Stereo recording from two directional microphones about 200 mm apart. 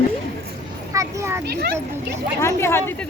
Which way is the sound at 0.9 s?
15° right (ahead or behind).